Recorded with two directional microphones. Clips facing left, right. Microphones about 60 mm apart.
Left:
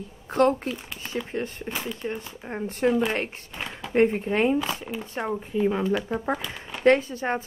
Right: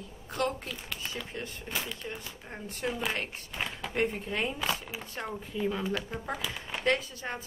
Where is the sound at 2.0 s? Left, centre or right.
Left.